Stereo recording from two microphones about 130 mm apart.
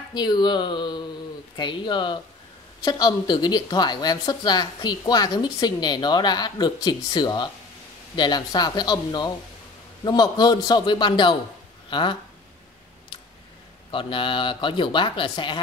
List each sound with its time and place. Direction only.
0.1 s a woman's voice: 35° left (ahead or behind)
13.9 s a woman's voice: 40° left (ahead or behind)